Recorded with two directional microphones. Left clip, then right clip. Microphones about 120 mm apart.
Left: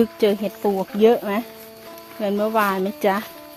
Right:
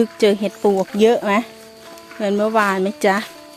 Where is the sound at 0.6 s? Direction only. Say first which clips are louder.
Right 2 dB; 50° right (ahead or behind); by 3.2 s 35° right (ahead or behind).